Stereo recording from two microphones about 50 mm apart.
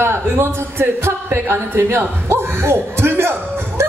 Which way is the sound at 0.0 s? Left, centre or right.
Right.